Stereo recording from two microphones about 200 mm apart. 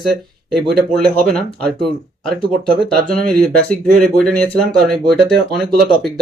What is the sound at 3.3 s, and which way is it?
Speech, 5° left (ahead or behind).